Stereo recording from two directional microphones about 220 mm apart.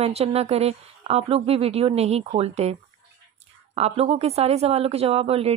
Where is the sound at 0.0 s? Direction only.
30° right (ahead or behind).